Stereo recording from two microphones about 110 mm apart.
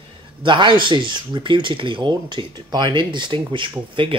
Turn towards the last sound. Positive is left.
turn(degrees=-50)  # may be behind; listen again after turning